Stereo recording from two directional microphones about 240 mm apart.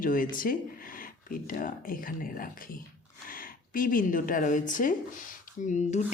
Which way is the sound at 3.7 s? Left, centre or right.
Left.